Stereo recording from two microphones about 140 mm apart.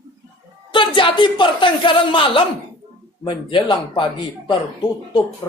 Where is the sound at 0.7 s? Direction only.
35° left (ahead or behind).